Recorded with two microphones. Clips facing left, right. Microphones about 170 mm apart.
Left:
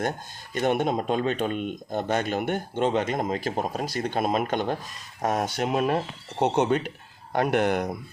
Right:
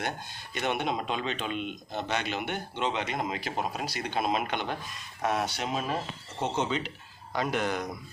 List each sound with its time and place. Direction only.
0.5 s speech: 45° left (ahead or behind)